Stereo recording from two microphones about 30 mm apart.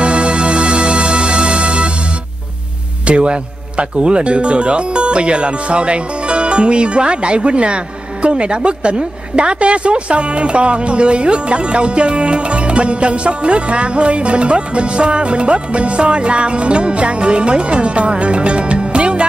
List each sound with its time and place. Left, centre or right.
0.0 s music: right
3.1 s speech: right